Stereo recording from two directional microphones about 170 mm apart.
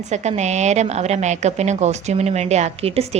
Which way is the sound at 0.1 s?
40° right (ahead or behind).